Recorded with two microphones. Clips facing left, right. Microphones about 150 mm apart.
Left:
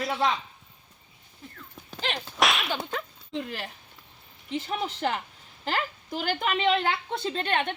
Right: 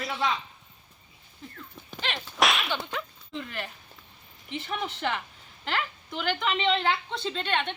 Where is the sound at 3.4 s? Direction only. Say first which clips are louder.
Left 1 dB; 35° left (ahead or behind).